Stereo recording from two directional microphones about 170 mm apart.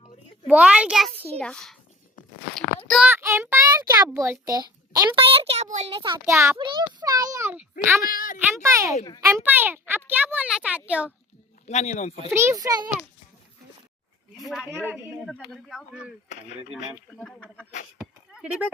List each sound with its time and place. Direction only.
0.4 s a woman's voice: 5° right (ahead or behind)
2.6 s a sound: centre (ahead or behind)
3.1 s a woman's voice: 15° right (ahead or behind)
4.9 s a child's voice: 30° right (ahead or behind); by 8.0 s 10° right (ahead or behind)
8.0 s a woman's voice: 55° left (ahead or behind)
8.4 s a woman's voice: 15° right (ahead or behind)
11.6 s speech: 40° left (ahead or behind)
12.3 s a child's voice: 15° right (ahead or behind)
14.6 s a woman's voice: 15° right (ahead or behind)
15.4 s speech: centre (ahead or behind)
17.2 s speech: 5° left (ahead or behind)
18.3 s speech: 10° right (ahead or behind)